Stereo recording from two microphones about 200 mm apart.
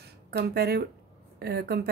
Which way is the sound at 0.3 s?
50° right (ahead or behind).